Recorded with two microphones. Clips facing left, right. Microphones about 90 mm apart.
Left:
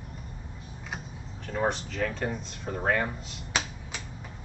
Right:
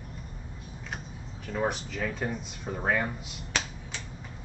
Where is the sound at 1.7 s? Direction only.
5° right (ahead or behind).